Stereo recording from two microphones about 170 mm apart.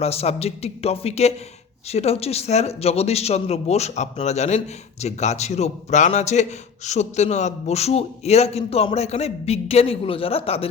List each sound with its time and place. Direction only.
0.0 s speech: 35° left (ahead or behind)